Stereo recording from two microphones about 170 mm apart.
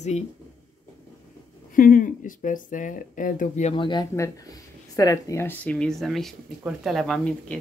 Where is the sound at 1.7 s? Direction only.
50° left (ahead or behind).